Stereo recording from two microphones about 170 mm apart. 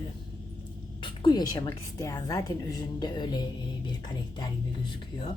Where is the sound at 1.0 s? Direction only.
25° left (ahead or behind).